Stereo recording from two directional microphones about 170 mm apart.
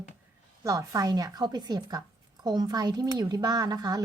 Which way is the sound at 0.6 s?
20° right (ahead or behind).